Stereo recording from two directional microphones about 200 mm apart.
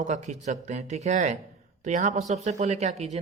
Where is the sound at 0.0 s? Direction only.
35° right (ahead or behind).